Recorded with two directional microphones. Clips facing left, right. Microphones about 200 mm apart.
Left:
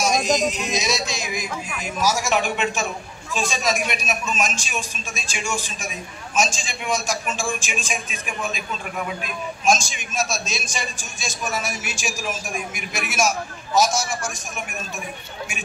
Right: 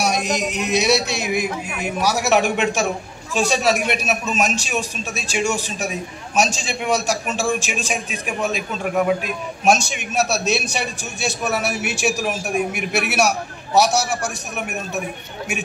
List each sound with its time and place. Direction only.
0.0 s a man's voice: 65° right (ahead or behind)